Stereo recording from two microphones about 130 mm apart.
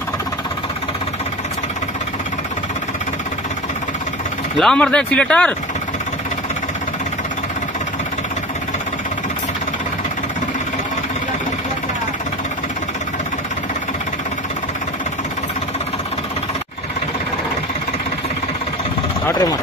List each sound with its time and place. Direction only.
4.6 s speech: 5° left (ahead or behind)